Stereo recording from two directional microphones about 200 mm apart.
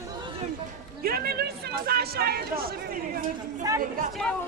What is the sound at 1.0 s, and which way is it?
Speech, 50° right (ahead or behind).